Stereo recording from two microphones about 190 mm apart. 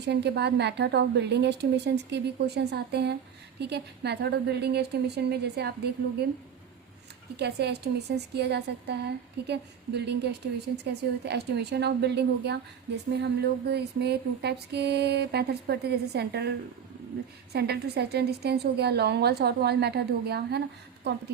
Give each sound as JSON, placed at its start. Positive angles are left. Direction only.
{"t": 0.1, "sound": "music", "side_deg": -60}
{"t": 7.3, "sound": "music", "side_deg": -60}
{"t": 17.5, "sound": "music", "side_deg": -60}